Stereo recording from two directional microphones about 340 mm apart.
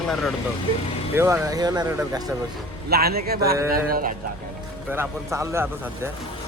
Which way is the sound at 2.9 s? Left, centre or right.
Right.